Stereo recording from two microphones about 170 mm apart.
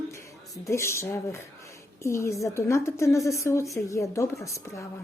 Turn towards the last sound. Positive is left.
turn(degrees=20)  # may be behind; listen again after turning